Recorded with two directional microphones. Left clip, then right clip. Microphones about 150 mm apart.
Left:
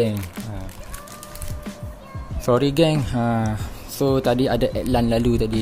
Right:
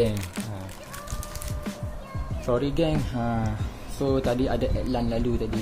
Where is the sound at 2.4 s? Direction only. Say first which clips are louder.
Left 7 dB; 35° left (ahead or behind).